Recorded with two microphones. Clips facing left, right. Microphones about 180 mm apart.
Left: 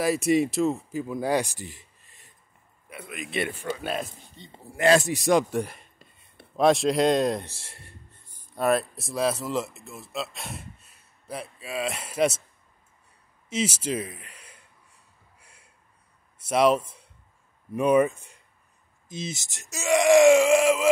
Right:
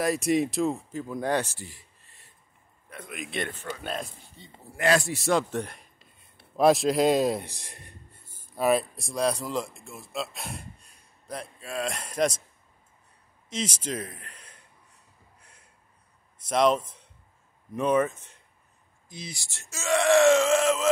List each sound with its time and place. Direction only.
0.0 s speech: centre (ahead or behind); by 2.3 s 20° left (ahead or behind)
2.9 s speech: 5° left (ahead or behind)
4.7 s speech: 25° left (ahead or behind); by 12.4 s 5° left (ahead or behind)
13.5 s speech: 5° left (ahead or behind)
15.3 s a sound: 10° left (ahead or behind)
16.4 s speech: 5° left (ahead or behind)
19.0 s speech: 20° left (ahead or behind)